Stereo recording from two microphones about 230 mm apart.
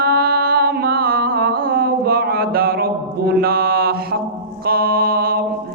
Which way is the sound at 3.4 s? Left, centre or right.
Right.